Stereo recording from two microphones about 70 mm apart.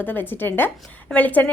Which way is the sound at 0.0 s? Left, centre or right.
Left.